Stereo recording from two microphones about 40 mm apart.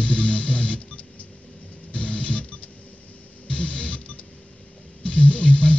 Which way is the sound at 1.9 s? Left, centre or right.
Left.